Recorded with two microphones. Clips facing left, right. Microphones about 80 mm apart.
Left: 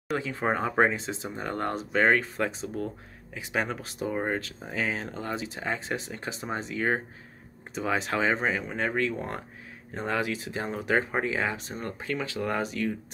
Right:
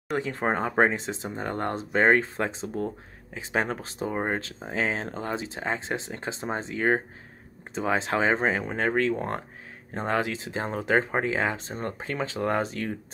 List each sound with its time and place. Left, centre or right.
0.2 s speech: right